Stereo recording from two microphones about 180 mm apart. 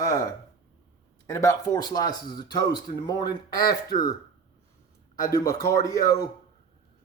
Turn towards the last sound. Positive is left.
turn(degrees=20)  # may be behind; listen again after turning